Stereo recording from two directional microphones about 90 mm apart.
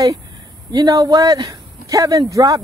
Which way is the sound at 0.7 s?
45° right (ahead or behind).